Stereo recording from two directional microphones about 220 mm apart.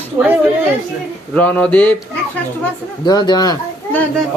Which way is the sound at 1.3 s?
5° left (ahead or behind).